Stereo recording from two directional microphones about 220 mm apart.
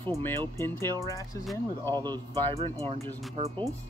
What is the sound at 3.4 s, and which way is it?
Speech, 25° right (ahead or behind).